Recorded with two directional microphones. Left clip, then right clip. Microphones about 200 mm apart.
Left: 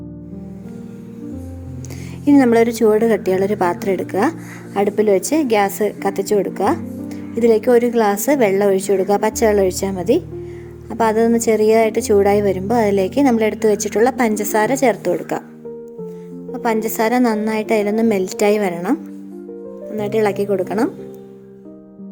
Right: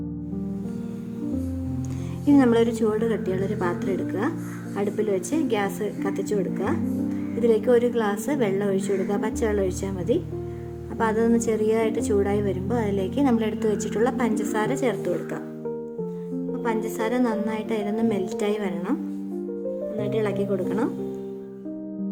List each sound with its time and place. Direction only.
2.2 s a woman's voice: 25° left (ahead or behind)
16.5 s a woman's voice: 30° left (ahead or behind)
20.0 s a woman's voice: 30° left (ahead or behind)